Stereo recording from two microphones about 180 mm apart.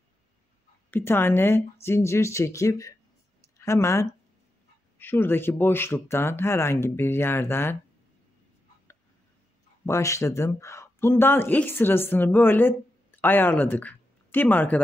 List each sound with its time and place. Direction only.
0.8 s speech: 10° left (ahead or behind)
9.8 s speech: 15° left (ahead or behind)